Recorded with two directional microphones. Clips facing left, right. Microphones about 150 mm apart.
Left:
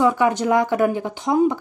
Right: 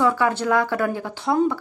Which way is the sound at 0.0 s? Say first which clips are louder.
Left 2 dB; 15° left (ahead or behind).